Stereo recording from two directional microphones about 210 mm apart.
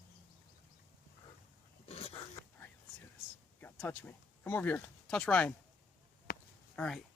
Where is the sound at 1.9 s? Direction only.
25° left (ahead or behind).